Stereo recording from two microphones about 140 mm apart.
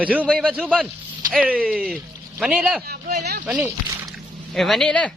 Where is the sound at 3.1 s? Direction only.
60° right (ahead or behind).